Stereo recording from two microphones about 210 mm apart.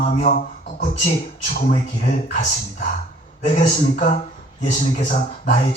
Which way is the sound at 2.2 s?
35° left (ahead or behind).